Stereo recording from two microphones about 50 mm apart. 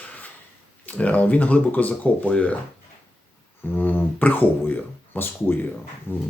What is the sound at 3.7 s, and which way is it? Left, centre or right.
Speech, left.